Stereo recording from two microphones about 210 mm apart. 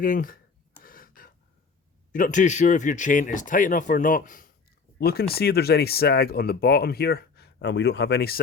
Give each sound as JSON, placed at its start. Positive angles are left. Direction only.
{"t": 0.0, "sound": "speech", "side_deg": 40}
{"t": 0.8, "sound": "gasp", "side_deg": 45}
{"t": 2.1, "sound": "speech", "side_deg": 40}